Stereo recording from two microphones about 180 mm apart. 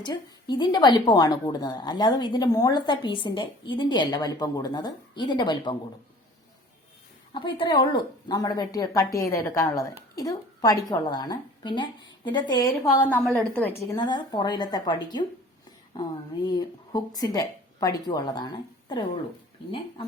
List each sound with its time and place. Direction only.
0.0 s speech: 25° left (ahead or behind)
7.3 s speech: 25° left (ahead or behind)
13.0 s a woman's voice: 10° left (ahead or behind)
13.8 s speech: 20° left (ahead or behind)
16.5 s speech: 20° left (ahead or behind)